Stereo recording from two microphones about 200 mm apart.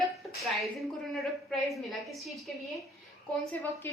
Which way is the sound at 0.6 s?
Centre (ahead or behind).